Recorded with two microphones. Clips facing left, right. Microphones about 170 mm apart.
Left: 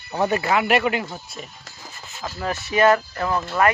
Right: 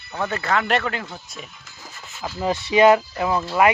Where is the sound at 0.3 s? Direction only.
15° left (ahead or behind).